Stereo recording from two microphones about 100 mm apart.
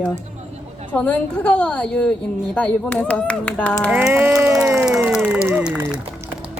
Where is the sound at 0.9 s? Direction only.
15° left (ahead or behind).